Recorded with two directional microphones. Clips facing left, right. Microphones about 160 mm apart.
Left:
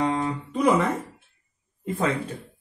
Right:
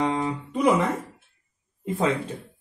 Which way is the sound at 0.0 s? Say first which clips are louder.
Even; 20° right (ahead or behind).